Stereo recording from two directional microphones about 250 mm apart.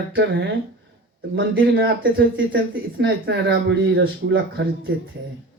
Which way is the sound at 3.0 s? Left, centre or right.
Right.